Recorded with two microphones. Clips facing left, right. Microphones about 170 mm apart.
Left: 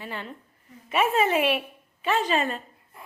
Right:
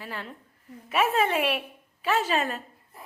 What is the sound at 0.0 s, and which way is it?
A woman's voice, centre (ahead or behind).